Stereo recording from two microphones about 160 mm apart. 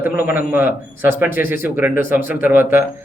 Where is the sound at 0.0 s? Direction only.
65° left (ahead or behind).